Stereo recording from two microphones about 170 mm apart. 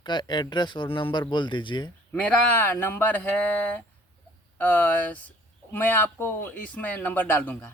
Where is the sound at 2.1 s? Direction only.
10° left (ahead or behind).